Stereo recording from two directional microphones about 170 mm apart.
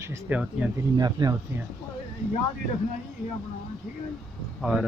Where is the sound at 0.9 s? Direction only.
20° right (ahead or behind).